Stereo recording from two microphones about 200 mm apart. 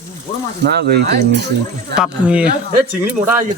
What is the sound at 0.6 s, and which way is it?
Speech, 55° right (ahead or behind).